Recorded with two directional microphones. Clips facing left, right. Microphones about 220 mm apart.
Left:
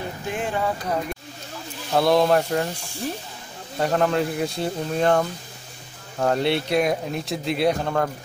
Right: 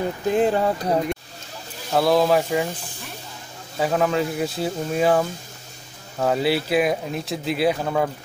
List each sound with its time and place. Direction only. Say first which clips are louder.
0.3 s speech: right 7 dB; 35° right (ahead or behind)
1.9 s speech: even; centre (ahead or behind)
3.7 s speech: even; 5° right (ahead or behind)